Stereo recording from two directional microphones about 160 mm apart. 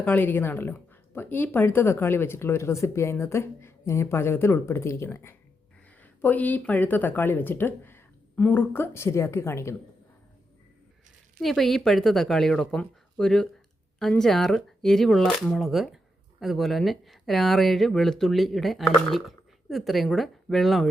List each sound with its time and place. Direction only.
0.0 s speech: 10° left (ahead or behind)
11.3 s speech: centre (ahead or behind)